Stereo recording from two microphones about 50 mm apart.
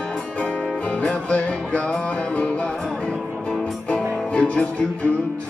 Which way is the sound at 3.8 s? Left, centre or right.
Left.